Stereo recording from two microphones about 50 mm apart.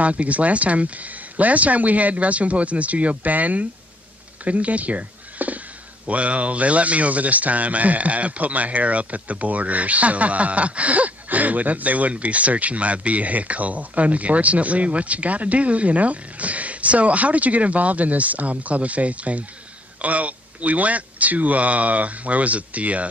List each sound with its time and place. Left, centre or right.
0.0 s speech: right